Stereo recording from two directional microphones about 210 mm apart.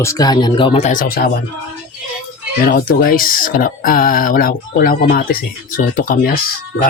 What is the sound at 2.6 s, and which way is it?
Speech, 45° left (ahead or behind).